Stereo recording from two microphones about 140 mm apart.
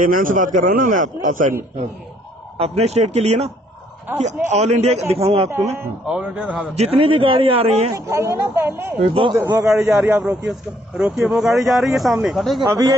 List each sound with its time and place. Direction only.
0.0 s a man's voice: 75° right (ahead or behind)
2.5 s a man's voice: 45° right (ahead or behind)
4.1 s a woman's voice: 15° right (ahead or behind)
4.5 s a man's voice: 50° right (ahead or behind)
5.5 s a woman's voice: 15° right (ahead or behind)
6.0 s a woman's voice: 5° right (ahead or behind)
6.8 s a man's voice: 40° right (ahead or behind)
7.9 s a woman's voice: 20° right (ahead or behind)
9.0 s a man's voice: 40° right (ahead or behind)
9.3 s a man's voice: 20° right (ahead or behind)
9.7 s speech: 5° right (ahead or behind)